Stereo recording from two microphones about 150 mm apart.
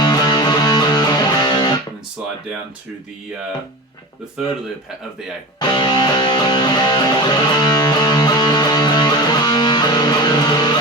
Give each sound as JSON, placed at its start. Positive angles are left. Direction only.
{"t": 0.0, "sound": "music", "side_deg": 30}
{"t": 5.5, "sound": "music", "side_deg": 30}